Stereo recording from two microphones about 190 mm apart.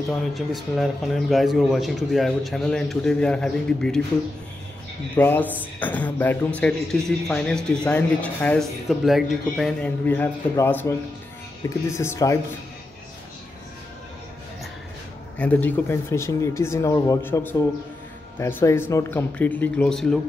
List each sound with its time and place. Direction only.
0.3 s speech: centre (ahead or behind)
5.1 s speech: 10° left (ahead or behind)
15.3 s speech: 10° left (ahead or behind)